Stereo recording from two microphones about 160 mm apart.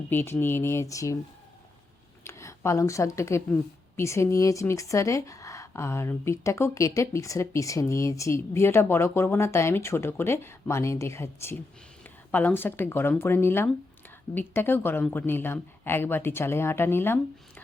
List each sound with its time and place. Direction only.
0.1 s speech: 15° left (ahead or behind)
2.2 s speech: 20° left (ahead or behind)